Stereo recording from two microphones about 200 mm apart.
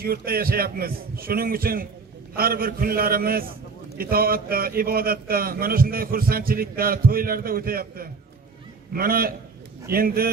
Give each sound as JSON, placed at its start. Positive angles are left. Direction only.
{"t": 0.0, "sound": "a man's voice", "side_deg": -50}